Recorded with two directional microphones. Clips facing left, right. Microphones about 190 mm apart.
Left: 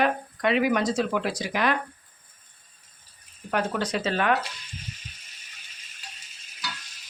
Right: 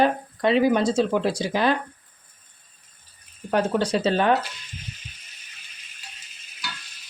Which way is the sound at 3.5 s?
30° right (ahead or behind).